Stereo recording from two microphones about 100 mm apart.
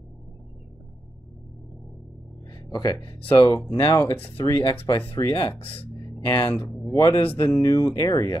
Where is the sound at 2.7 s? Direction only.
40° left (ahead or behind).